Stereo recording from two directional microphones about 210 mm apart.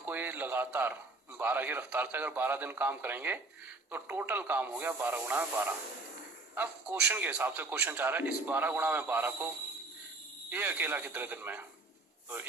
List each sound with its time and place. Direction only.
0.0 s a man's voice: 10° right (ahead or behind)
7.1 s a man's voice: 5° right (ahead or behind)
10.5 s a man's voice: 10° right (ahead or behind)